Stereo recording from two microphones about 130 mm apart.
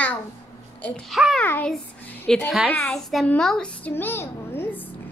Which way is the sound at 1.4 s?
10° left (ahead or behind).